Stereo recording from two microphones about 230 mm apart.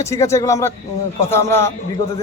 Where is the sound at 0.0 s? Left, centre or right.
Centre.